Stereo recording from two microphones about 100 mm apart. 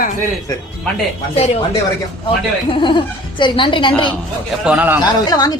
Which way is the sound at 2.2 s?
55° left (ahead or behind).